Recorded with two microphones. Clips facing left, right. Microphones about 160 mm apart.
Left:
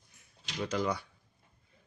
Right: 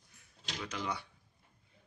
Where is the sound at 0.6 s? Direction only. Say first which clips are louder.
Left 8 dB; 40° left (ahead or behind).